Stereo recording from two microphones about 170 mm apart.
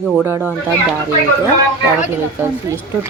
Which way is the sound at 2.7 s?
15° right (ahead or behind).